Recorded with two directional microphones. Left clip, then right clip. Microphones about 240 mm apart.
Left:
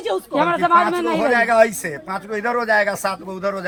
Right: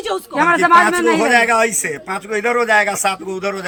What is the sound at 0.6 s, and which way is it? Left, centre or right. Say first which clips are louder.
Speech: right 5 dB; left.